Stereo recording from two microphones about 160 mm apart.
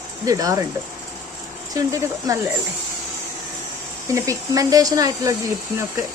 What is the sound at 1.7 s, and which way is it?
Speech, 20° right (ahead or behind).